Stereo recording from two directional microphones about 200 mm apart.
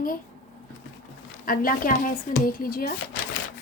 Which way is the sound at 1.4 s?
45° left (ahead or behind).